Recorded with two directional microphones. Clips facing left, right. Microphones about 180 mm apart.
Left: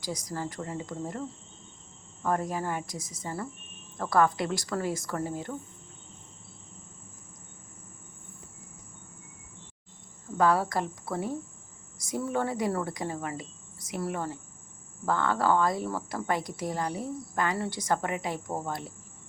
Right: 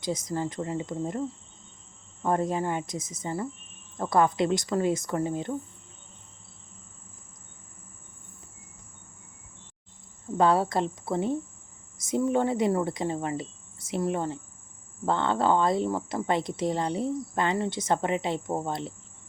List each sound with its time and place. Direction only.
0.0 s speech: 25° right (ahead or behind)
2.2 s speech: 25° right (ahead or behind)
10.3 s speech: 25° right (ahead or behind)